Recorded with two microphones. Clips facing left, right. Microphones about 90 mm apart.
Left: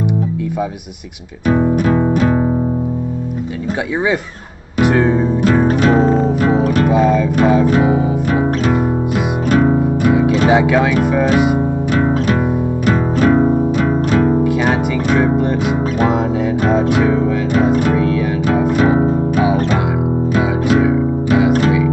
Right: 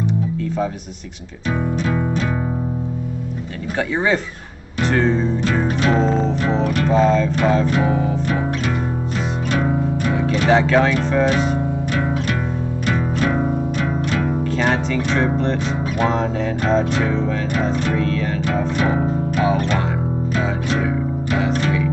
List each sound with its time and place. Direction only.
1.9 s music: 25° left (ahead or behind)
4.7 s music: 15° left (ahead or behind)
5.7 s music: 45° left (ahead or behind)
5.9 s music: 10° left (ahead or behind)
6.6 s music: 40° left (ahead or behind)
6.9 s music: 15° left (ahead or behind)
10.0 s music: 15° left (ahead or behind)
13.2 s music: 20° left (ahead or behind)
14.1 s music: 35° left (ahead or behind)
14.4 s music: 15° left (ahead or behind)
19.3 s music: 15° left (ahead or behind)